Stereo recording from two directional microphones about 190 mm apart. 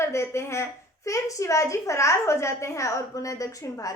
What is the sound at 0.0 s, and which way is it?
A woman's voice, 15° left (ahead or behind).